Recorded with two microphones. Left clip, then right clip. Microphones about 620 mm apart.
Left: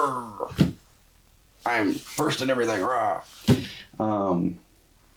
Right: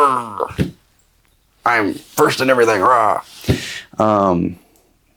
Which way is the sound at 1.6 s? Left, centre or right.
Right.